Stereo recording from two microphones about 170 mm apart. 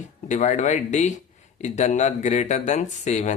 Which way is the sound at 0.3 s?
45° left (ahead or behind).